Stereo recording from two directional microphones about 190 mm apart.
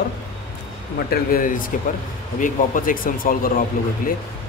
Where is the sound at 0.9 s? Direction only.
50° left (ahead or behind).